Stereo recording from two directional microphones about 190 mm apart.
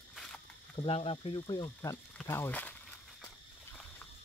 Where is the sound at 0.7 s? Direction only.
30° left (ahead or behind); by 2.7 s 10° left (ahead or behind).